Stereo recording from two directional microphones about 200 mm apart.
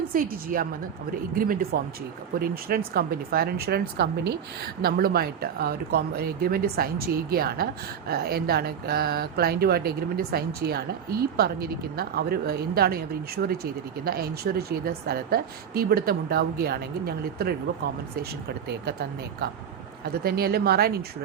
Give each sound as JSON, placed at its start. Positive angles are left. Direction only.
{"t": 0.1, "sound": "speech", "side_deg": -45}
{"t": 18.9, "sound": "speech", "side_deg": -55}